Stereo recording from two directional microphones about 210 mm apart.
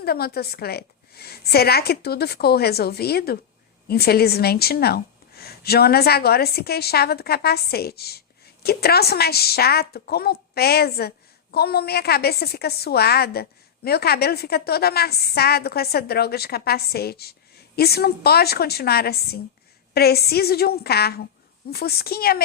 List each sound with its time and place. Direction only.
0.0 s a woman's voice: 50° left (ahead or behind)